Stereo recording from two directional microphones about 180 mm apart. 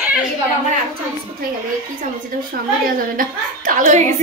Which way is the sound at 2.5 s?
50° right (ahead or behind).